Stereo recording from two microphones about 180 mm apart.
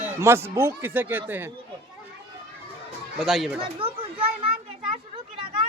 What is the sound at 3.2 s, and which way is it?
Speech, centre (ahead or behind).